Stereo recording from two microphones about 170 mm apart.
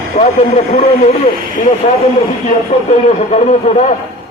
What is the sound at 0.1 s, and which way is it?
Speech, 35° left (ahead or behind).